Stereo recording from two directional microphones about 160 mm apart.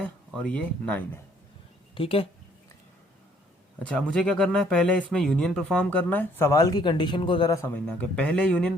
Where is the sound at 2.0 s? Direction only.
35° left (ahead or behind).